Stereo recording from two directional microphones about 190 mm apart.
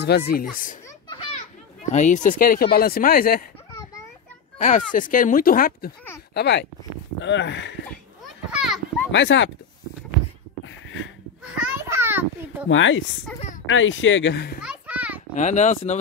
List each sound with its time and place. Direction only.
0.3 s speech: 50° left (ahead or behind)
1.9 s speech: 40° left (ahead or behind)
4.6 s speech: 40° left (ahead or behind); by 7.7 s 70° left (ahead or behind)
8.5 s children playing: 5° right (ahead or behind)
9.1 s speech: 70° left (ahead or behind)
10.6 s a sound: 85° left
11.6 s children playing: 10° right (ahead or behind)
12.6 s speech: 90° left; by 14.6 s 60° left (ahead or behind)
14.6 s children playing: 5° right (ahead or behind)
15.3 s speech: 40° left (ahead or behind)